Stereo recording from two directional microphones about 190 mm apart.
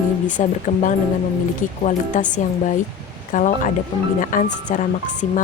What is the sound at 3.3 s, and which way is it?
A woman's voice, 40° left (ahead or behind).